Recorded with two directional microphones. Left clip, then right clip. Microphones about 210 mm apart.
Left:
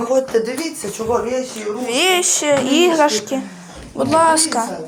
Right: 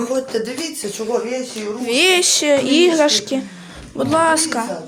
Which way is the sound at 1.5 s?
25° right (ahead or behind).